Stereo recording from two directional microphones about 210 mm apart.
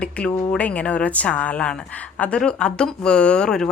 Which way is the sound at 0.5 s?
5° left (ahead or behind).